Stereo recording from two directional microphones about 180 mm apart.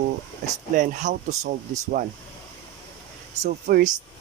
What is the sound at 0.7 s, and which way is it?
Speech, 45° right (ahead or behind).